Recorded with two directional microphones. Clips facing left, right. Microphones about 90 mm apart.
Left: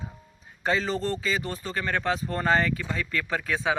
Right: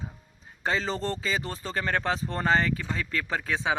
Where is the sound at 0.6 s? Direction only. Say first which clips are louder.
Left 2 dB; 30° right (ahead or behind).